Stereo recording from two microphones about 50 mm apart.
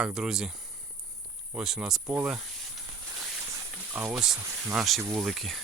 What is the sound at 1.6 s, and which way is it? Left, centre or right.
Speech, centre.